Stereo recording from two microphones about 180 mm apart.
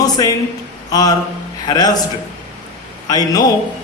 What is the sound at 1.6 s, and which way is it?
Speech, 20° left (ahead or behind).